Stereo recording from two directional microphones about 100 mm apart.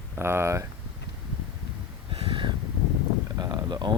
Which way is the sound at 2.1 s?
65° right (ahead or behind).